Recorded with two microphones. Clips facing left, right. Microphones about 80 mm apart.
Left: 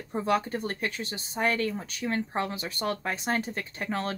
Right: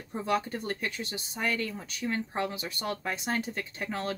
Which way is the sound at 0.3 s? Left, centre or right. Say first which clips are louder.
Left 2 dB; left.